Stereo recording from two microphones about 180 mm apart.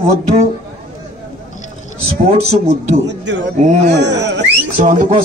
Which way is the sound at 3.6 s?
40° right (ahead or behind).